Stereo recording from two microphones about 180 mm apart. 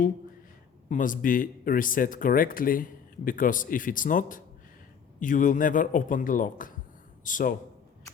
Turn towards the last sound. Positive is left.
turn(degrees=45)  # may be behind; listen again after turning